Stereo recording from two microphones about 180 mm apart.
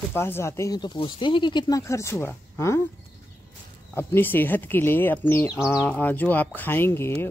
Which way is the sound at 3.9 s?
10° left (ahead or behind).